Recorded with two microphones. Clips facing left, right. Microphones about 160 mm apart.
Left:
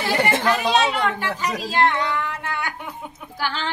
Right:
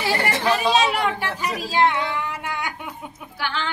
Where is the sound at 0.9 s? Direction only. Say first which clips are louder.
Even; 10° right (ahead or behind).